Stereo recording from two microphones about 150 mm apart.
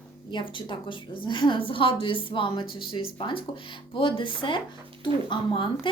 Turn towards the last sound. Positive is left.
turn(degrees=30)  # may be behind; listen again after turning